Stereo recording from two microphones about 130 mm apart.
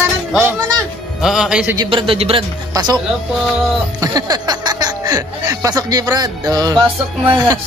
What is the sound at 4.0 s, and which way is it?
Speech, 30° right (ahead or behind).